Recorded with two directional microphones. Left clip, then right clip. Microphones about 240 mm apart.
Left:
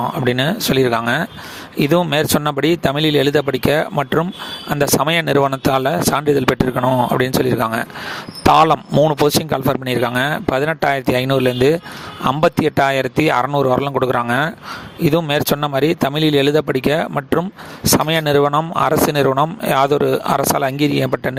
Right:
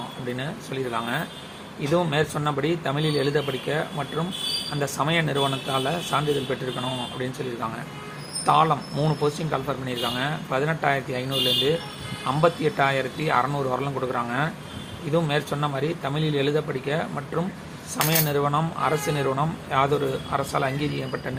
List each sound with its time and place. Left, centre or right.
0.3 s speech: left